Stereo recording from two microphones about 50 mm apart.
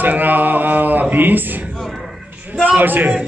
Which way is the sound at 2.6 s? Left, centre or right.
Right.